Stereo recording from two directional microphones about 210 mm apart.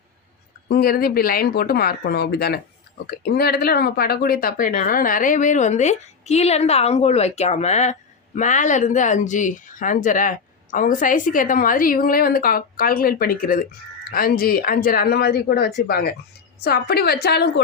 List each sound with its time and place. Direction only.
0.7 s speech: 45° left (ahead or behind)